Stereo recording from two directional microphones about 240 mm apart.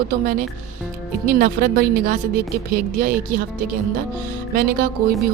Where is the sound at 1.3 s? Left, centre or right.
Right.